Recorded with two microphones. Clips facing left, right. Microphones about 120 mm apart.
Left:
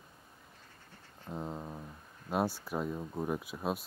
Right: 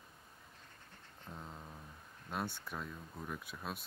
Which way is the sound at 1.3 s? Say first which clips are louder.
Left 10 dB; 35° left (ahead or behind).